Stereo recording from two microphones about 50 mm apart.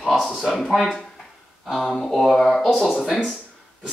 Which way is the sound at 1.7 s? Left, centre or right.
Centre.